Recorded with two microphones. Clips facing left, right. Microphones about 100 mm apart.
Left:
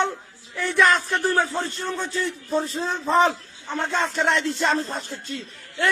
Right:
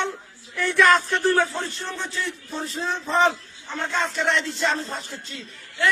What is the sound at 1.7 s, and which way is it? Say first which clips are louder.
A man's voice: left 3 dB; 45° left (ahead or behind).